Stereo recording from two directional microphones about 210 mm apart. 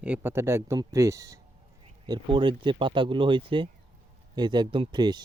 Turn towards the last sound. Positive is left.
turn(degrees=-20)  # may be behind; listen again after turning